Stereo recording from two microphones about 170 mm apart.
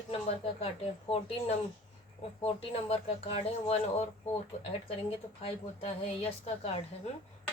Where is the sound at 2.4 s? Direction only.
35° left (ahead or behind).